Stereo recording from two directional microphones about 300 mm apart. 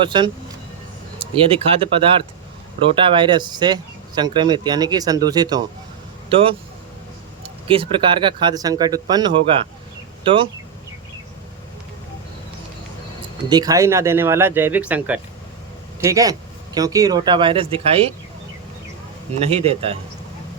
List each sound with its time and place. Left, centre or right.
0.0 s speech: centre
2.9 s speech: centre
7.7 s speech: centre
13.5 s speech: centre
19.3 s a man's voice: centre